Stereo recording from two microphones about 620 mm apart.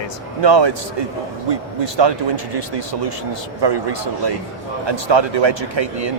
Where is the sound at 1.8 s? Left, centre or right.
Right.